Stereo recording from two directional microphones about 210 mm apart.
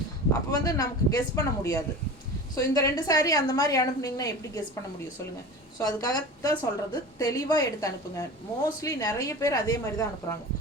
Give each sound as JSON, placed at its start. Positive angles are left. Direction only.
{"t": 0.5, "sound": "a woman's voice", "side_deg": 15}
{"t": 5.8, "sound": "a woman's voice", "side_deg": 20}